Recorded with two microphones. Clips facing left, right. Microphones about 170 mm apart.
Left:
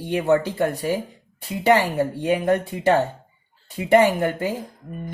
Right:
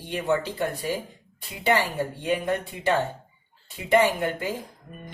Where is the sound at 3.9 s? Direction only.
45° left (ahead or behind).